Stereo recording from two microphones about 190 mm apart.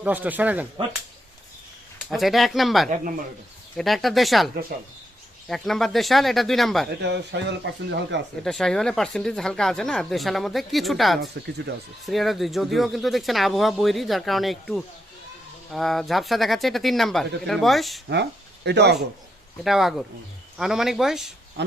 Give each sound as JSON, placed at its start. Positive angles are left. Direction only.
{"t": 0.0, "sound": "speech", "side_deg": -10}
{"t": 2.0, "sound": "speech", "side_deg": 0}
{"t": 2.9, "sound": "speech", "side_deg": -45}
{"t": 3.8, "sound": "speech", "side_deg": 0}
{"t": 7.0, "sound": "speech", "side_deg": -65}
{"t": 8.4, "sound": "speech", "side_deg": 5}
{"t": 11.4, "sound": "speech", "side_deg": -60}
{"t": 12.0, "sound": "speech", "side_deg": 0}
{"t": 18.1, "sound": "speech", "side_deg": -65}
{"t": 19.6, "sound": "speech", "side_deg": 0}